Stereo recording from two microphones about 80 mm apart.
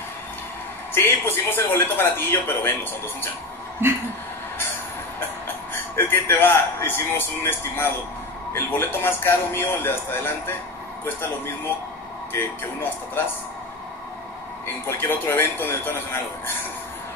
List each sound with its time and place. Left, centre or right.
0.9 s speech: left
3.8 s speech: right
5.9 s speech: left
14.9 s speech: left